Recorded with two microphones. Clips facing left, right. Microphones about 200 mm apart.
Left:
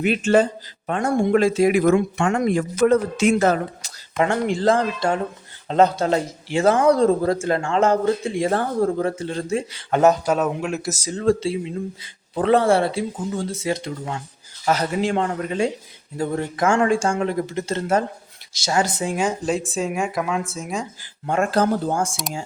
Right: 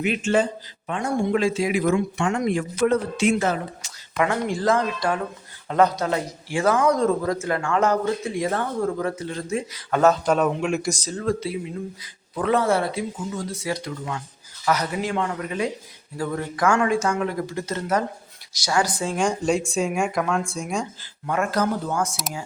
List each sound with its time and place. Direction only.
0.0 s a man's voice: 40° left (ahead or behind); by 2.5 s 55° left (ahead or behind)
2.5 s a man's voice: 40° left (ahead or behind)
4.4 s speech: 25° left (ahead or behind)
10.0 s speech: 15° left (ahead or behind)
10.3 s speech: 5° left (ahead or behind)
11.1 s speech: 30° left (ahead or behind)
19.1 s speech: 5° left (ahead or behind)
21.2 s speech: 30° left (ahead or behind)